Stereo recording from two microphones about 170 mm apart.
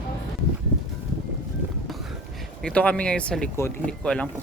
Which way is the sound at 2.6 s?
5° left (ahead or behind).